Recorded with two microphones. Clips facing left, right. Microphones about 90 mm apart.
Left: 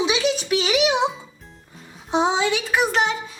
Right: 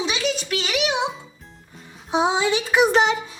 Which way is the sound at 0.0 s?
5° left (ahead or behind).